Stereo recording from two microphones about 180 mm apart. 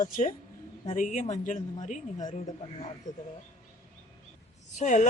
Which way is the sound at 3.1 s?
45° left (ahead or behind).